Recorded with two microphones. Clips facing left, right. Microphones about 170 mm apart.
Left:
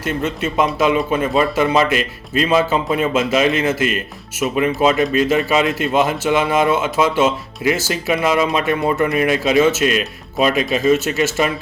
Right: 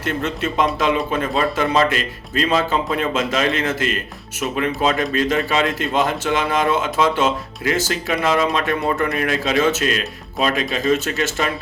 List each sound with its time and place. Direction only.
0.0 s a man's voice: 5° left (ahead or behind)